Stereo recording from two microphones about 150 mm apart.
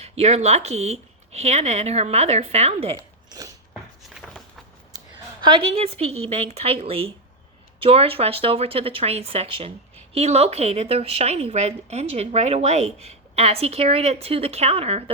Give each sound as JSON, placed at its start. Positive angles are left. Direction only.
{"t": 0.0, "sound": "speech", "side_deg": -45}
{"t": 2.9, "sound": "zipper", "side_deg": -25}
{"t": 4.9, "sound": "a woman's voice", "side_deg": -25}